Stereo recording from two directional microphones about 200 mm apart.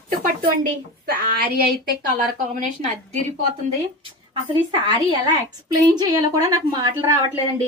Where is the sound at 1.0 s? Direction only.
45° right (ahead or behind).